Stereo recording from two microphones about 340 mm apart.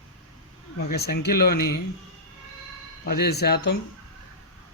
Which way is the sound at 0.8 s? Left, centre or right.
Left.